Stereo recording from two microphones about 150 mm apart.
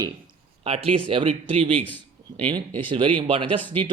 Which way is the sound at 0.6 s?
40° right (ahead or behind).